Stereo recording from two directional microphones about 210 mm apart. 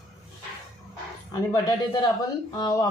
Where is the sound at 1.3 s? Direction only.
20° left (ahead or behind).